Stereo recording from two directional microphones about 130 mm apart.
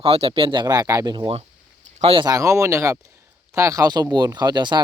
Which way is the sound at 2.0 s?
50° right (ahead or behind).